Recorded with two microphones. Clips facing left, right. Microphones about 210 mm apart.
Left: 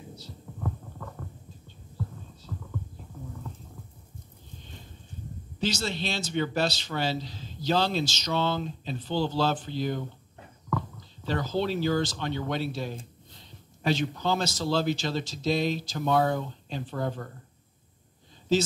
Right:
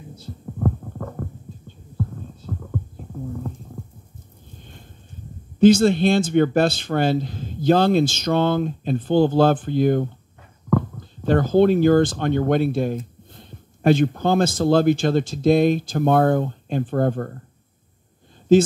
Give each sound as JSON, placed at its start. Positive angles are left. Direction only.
{"t": 0.1, "sound": "heart sounds", "side_deg": -50}
{"t": 4.6, "sound": "a sound", "side_deg": -55}
{"t": 5.6, "sound": "a man's voice", "side_deg": -50}
{"t": 18.5, "sound": "a man's voice", "side_deg": -55}